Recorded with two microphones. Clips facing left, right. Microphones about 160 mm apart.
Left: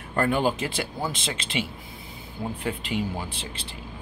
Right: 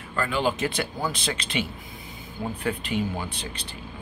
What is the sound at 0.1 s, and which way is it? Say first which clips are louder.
Speech: left 3 dB; 50° left (ahead or behind).